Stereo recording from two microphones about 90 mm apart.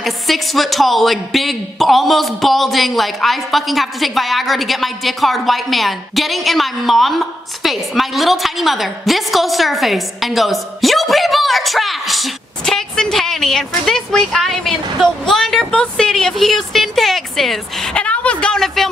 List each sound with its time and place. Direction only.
0.0 s a man's voice: centre (ahead or behind)